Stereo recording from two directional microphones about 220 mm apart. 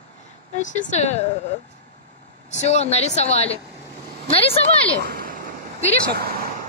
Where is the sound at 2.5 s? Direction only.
30° left (ahead or behind).